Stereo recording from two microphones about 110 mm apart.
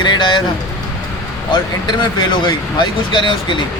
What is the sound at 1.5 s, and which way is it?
Speech, 50° left (ahead or behind).